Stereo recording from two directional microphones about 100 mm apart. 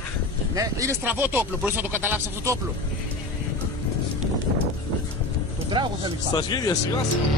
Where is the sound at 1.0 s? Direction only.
20° right (ahead or behind).